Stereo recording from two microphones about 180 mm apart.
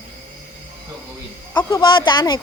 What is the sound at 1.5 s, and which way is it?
Speech, 25° left (ahead or behind).